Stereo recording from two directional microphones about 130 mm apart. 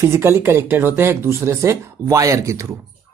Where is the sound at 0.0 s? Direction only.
20° right (ahead or behind).